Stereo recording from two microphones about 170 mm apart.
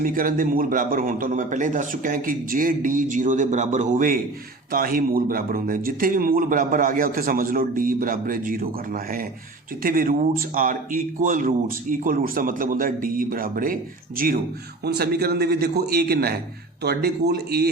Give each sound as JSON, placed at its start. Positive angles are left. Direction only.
{"t": 0.0, "sound": "a man's voice", "side_deg": -55}
{"t": 14.8, "sound": "a man's voice", "side_deg": -70}